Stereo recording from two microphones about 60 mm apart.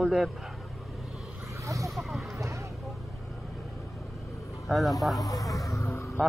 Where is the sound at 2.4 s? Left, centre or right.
Right.